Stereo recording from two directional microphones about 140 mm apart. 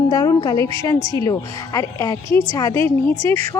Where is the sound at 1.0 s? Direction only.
35° right (ahead or behind).